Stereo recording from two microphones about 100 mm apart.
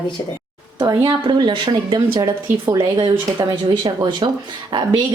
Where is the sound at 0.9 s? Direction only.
50° right (ahead or behind).